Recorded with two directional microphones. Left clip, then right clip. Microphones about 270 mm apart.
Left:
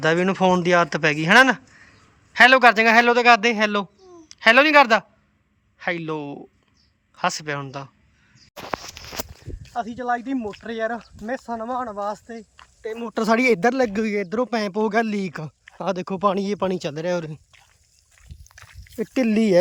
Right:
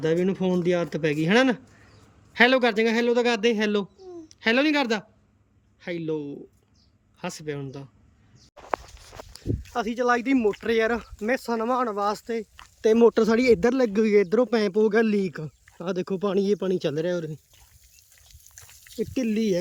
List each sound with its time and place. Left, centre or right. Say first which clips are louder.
0.0 s speech: left 6 dB; centre
9.6 s speech: right 1 dB; centre
12.8 s speech: right 12 dB; right
13.1 s speech: left 1 dB; centre
19.1 s speech: left 6 dB; centre